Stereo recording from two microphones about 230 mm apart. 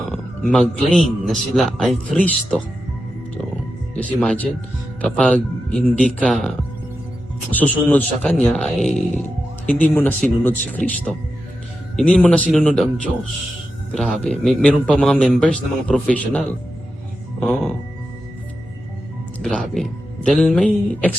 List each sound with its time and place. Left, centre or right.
0.1 s a man's voice: centre
3.9 s a man's voice: centre
7.5 s a man's voice: centre
13.9 s a man's voice: centre
19.4 s a man's voice: centre